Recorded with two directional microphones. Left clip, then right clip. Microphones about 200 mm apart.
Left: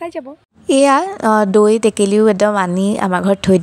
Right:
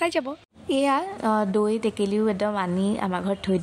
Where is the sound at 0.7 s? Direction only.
40° left (ahead or behind).